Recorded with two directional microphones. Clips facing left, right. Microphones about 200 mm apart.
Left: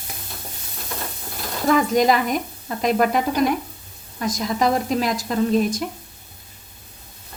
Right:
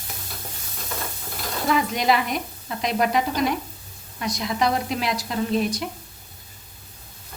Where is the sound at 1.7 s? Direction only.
45° left (ahead or behind).